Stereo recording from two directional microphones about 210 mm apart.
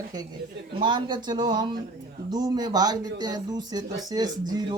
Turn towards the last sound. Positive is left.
turn(degrees=-20)  # may be behind; listen again after turning